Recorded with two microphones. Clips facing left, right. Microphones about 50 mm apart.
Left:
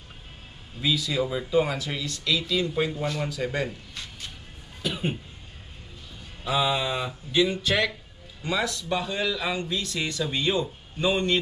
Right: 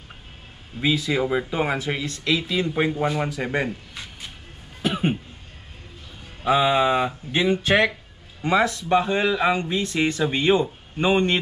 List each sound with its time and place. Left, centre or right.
0.7 s speech: right
4.8 s cough: right
6.4 s speech: right